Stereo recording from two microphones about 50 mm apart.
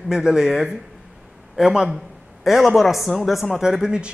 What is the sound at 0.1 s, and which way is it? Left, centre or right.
A man's voice, centre.